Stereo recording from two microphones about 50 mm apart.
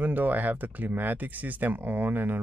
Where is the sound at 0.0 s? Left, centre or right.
Right.